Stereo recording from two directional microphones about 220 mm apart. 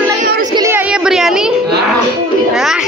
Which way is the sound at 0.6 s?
10° right (ahead or behind).